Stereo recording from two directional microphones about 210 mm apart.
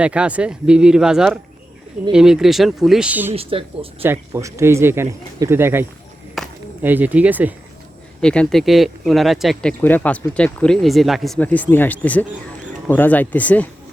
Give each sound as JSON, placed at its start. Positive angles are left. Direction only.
{"t": 0.0, "sound": "speech", "side_deg": -5}
{"t": 3.3, "sound": "speech", "side_deg": -25}
{"t": 4.0, "sound": "speech", "side_deg": -10}
{"t": 6.3, "sound": "a sound", "side_deg": -5}
{"t": 8.2, "sound": "speech", "side_deg": 5}